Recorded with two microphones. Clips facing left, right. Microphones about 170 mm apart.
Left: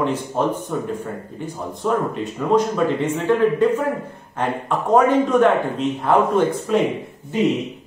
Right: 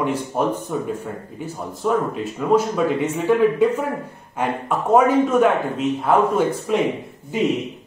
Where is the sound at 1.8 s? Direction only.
5° right (ahead or behind).